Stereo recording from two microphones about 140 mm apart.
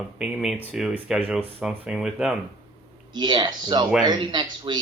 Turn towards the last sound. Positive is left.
turn(degrees=-35)  # may be behind; listen again after turning